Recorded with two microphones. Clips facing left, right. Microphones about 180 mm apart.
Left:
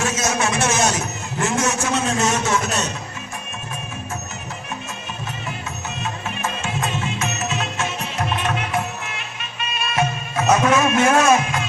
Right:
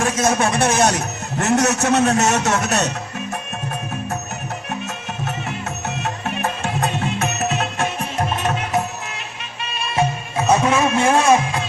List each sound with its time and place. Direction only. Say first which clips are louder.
0.0 s a man's voice: right 4 dB; 55° right (ahead or behind)
6.0 s music: right 3 dB; 60° right (ahead or behind); by 8.5 s 45° right (ahead or behind)
9.7 s music: right 2 dB; 30° right (ahead or behind)